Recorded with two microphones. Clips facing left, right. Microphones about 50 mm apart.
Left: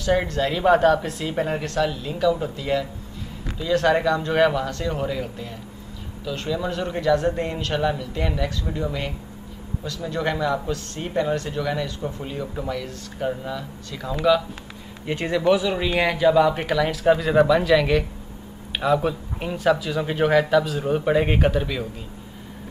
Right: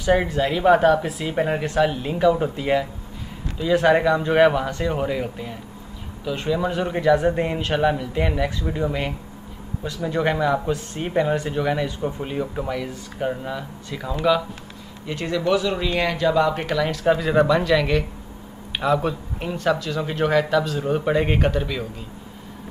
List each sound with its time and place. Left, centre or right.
0.0 s a man's voice: centre
15.0 s speech: left; by 22.0 s centre